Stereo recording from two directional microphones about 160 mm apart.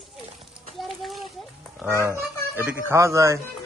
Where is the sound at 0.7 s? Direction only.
Centre (ahead or behind).